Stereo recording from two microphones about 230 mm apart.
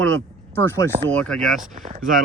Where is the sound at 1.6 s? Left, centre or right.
Right.